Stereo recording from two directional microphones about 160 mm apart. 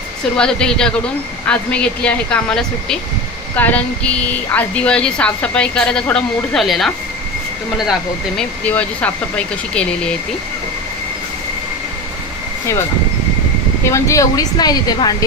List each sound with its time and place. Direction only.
0.4 s speech: 5° left (ahead or behind)
8.6 s speech: 10° left (ahead or behind)
13.8 s speech: 20° left (ahead or behind)